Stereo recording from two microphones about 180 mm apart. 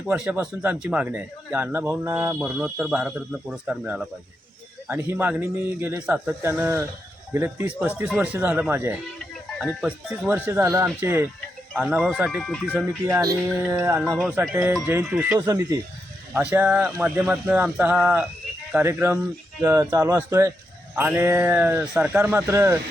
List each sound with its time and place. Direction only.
0.1 s a man's voice: 10° right (ahead or behind)
11.8 s speech: 5° right (ahead or behind)
13.1 s a man's voice: 15° right (ahead or behind)